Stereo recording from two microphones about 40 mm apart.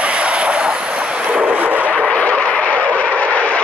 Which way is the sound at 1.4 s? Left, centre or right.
Right.